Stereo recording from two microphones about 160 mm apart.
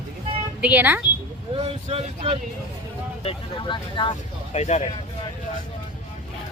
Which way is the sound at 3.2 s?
35° left (ahead or behind).